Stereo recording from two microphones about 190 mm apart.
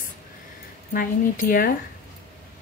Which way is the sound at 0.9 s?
45° left (ahead or behind).